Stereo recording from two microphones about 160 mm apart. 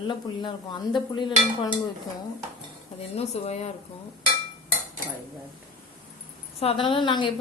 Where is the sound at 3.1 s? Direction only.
40° left (ahead or behind).